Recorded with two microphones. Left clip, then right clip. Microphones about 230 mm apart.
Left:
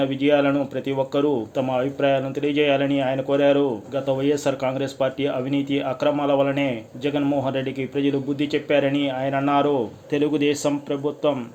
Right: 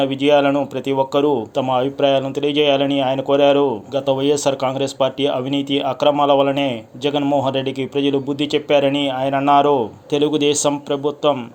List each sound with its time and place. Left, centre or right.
0.0 s a man's voice: right